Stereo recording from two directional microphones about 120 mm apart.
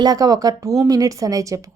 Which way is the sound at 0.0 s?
30° right (ahead or behind).